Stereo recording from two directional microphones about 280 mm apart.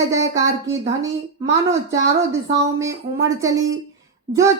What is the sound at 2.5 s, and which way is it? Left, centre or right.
A child's voice, centre.